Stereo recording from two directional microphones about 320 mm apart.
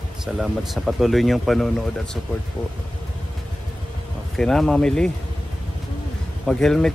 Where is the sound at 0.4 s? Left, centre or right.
Centre.